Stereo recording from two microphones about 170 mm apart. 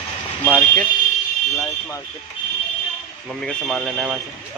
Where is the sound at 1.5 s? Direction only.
20° left (ahead or behind).